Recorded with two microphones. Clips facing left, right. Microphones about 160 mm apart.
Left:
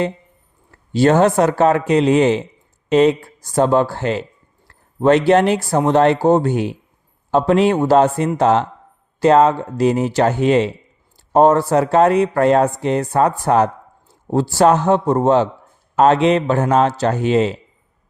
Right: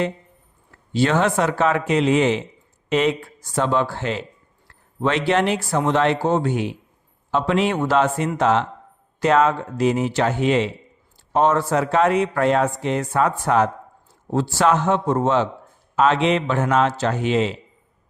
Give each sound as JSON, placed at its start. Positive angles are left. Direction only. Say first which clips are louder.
{"t": 0.9, "sound": "speech", "louder": "left 6 dB", "side_deg": 40}